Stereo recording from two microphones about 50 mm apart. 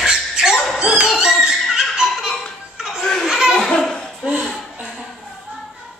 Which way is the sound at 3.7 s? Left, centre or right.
Centre.